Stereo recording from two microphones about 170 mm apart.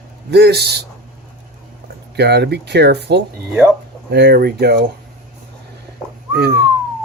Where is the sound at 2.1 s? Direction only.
75° right (ahead or behind).